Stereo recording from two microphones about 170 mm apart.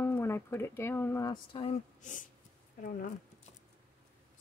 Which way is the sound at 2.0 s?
50° left (ahead or behind).